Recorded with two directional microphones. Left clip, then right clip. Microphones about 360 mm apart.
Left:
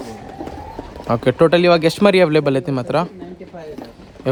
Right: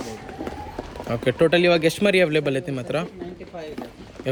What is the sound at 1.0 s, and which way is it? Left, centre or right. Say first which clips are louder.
Speech: left 6 dB; centre.